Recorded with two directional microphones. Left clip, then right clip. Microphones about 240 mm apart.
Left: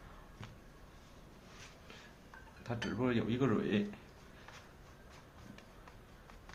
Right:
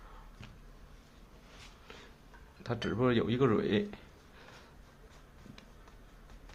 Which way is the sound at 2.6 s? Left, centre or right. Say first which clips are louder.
Right 6 dB; right.